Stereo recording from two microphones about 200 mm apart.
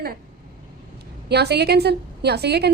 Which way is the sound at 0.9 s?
55° right (ahead or behind).